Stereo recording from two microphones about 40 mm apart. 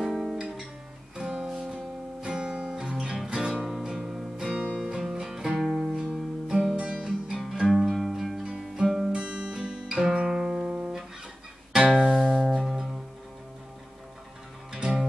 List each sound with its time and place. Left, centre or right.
0.0 s guitar: centre
1.1 s music: centre
2.2 s guitar: right
3.3 s music: right
7.6 s music: centre
9.1 s guitar: right
11.7 s music: centre
14.7 s music: right